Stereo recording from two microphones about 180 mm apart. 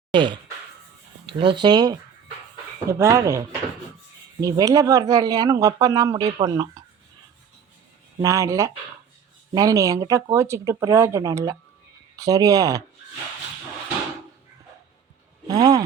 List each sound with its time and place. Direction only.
0.1 s speech: 25° right (ahead or behind)
8.2 s speech: 20° right (ahead or behind)
15.4 s speech: 20° right (ahead or behind)